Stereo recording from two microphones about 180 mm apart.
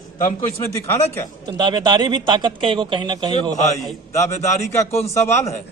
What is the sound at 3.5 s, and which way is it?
Speech, 40° left (ahead or behind).